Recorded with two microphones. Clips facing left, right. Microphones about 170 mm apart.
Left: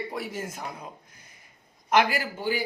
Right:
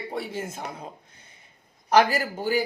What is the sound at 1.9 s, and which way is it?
Speech, 40° right (ahead or behind).